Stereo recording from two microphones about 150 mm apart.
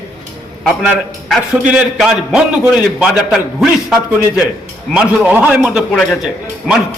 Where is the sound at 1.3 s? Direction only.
5° right (ahead or behind).